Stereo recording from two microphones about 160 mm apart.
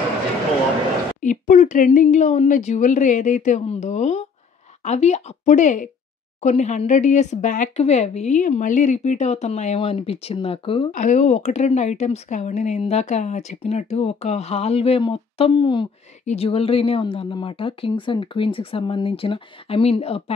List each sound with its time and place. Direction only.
1.2 s speech: 50° left (ahead or behind); by 10.9 s 35° left (ahead or behind)
10.9 s speech: 50° left (ahead or behind)